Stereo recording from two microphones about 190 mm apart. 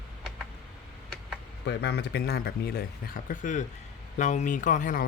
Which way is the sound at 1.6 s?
60° left (ahead or behind).